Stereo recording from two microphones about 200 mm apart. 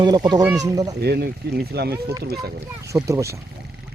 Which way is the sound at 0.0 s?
20° right (ahead or behind).